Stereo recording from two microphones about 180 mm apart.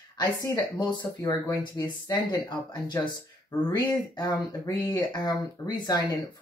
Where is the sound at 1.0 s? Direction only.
20° left (ahead or behind).